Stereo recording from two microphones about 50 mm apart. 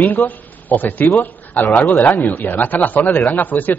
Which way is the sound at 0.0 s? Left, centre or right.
Left.